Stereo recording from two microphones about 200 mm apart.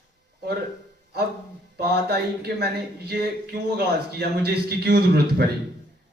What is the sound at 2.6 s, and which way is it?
Speech, 50° right (ahead or behind).